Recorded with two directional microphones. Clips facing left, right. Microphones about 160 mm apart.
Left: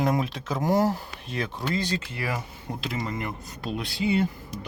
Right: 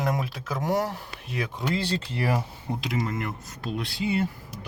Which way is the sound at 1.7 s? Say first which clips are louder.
Right 1 dB; 30° right (ahead or behind).